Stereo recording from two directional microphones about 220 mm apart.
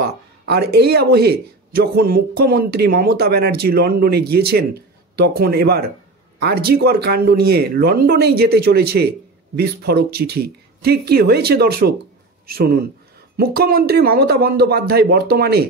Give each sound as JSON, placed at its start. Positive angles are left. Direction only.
{"t": 0.0, "sound": "speech", "side_deg": -45}